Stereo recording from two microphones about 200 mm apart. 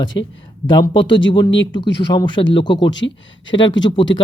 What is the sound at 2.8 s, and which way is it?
Speech, 65° left (ahead or behind).